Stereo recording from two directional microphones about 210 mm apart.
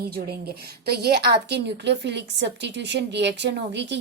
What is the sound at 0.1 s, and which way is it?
A woman's voice, 50° right (ahead or behind).